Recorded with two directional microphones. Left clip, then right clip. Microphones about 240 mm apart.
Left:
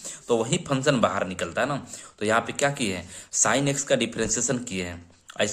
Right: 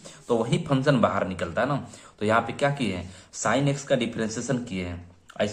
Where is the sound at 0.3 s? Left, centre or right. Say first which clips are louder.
Left 1 dB; left.